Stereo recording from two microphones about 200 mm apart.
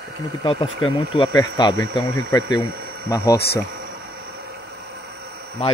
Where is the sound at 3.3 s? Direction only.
50° left (ahead or behind).